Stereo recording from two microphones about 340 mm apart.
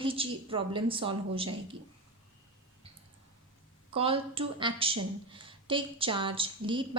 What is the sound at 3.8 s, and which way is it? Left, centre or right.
A woman's voice, centre.